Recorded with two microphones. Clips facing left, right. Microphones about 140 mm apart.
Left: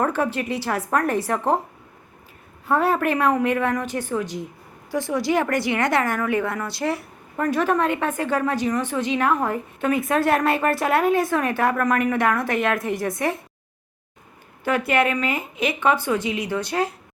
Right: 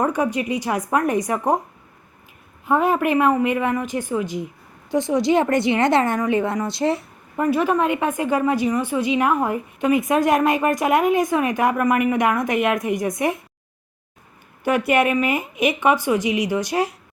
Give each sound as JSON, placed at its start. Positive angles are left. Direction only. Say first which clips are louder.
{"t": 0.0, "sound": "a woman's voice", "louder": "right 2 dB", "side_deg": -15}
{"t": 2.6, "sound": "a woman's voice", "louder": "right 2 dB", "side_deg": -15}
{"t": 7.3, "sound": "a woman's voice", "louder": "right 2 dB", "side_deg": -10}
{"t": 14.6, "sound": "a woman's voice", "louder": "right 2 dB", "side_deg": -15}